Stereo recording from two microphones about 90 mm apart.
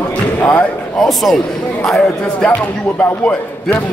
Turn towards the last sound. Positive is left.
turn(degrees=15)  # may be behind; listen again after turning